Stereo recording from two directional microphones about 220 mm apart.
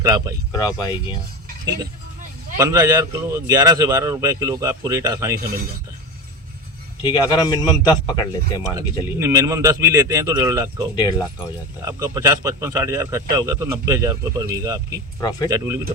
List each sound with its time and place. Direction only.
0.0 s a man's voice: 15° right (ahead or behind)
0.5 s a man's voice: 20° left (ahead or behind)
2.6 s a man's voice: 15° right (ahead or behind)
7.0 s a man's voice: 20° left (ahead or behind)
9.1 s a man's voice: 15° right (ahead or behind)
10.9 s a man's voice: 20° left (ahead or behind)
11.9 s a man's voice: 15° right (ahead or behind)
15.2 s a man's voice: 20° left (ahead or behind)
15.4 s a man's voice: 10° right (ahead or behind)